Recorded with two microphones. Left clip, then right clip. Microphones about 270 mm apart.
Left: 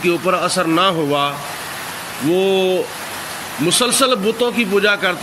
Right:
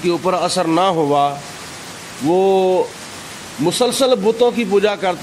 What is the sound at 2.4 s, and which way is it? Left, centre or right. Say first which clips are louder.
Speech: right 3 dB; right.